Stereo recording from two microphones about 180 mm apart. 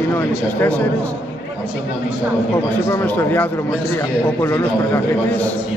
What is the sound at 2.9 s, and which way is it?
Speech, 10° left (ahead or behind).